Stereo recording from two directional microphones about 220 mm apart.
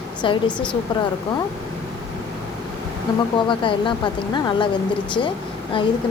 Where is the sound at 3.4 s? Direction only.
20° left (ahead or behind).